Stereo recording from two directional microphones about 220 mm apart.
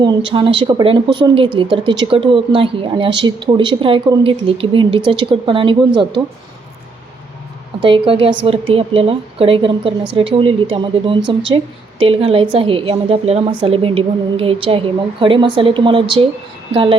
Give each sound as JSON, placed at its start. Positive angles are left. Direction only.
{"t": 0.3, "sound": "speech", "side_deg": -25}
{"t": 7.8, "sound": "speech", "side_deg": -20}